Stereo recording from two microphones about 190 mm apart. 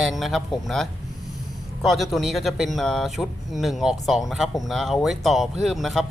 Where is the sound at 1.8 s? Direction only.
Centre (ahead or behind).